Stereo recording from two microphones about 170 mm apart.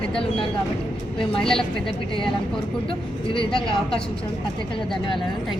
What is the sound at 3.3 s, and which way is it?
Speech, 30° left (ahead or behind).